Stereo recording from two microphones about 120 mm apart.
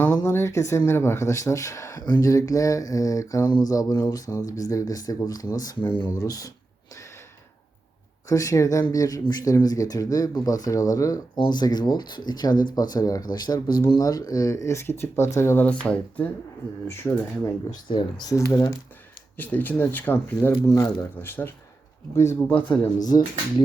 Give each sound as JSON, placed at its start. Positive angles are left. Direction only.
{"t": 0.2, "sound": "speech", "side_deg": 25}
{"t": 8.3, "sound": "speech", "side_deg": 25}
{"t": 16.8, "sound": "speech", "side_deg": 25}
{"t": 17.8, "sound": "speech", "side_deg": 45}
{"t": 18.3, "sound": "speech", "side_deg": 25}
{"t": 19.4, "sound": "speech", "side_deg": 15}